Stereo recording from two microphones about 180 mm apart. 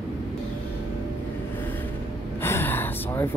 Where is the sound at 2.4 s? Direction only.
10° left (ahead or behind).